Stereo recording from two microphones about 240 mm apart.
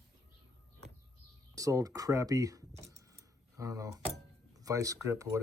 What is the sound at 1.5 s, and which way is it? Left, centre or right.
Speech, centre.